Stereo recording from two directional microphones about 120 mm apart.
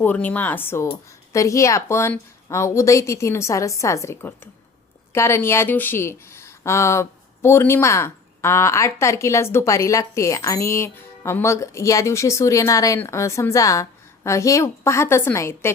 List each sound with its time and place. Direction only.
0.0 s speech: 15° left (ahead or behind)